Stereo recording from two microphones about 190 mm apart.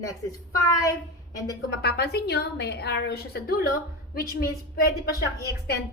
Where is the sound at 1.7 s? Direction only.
55° left (ahead or behind).